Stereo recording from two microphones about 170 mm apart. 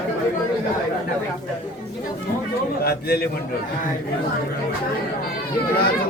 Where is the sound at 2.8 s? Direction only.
65° left (ahead or behind).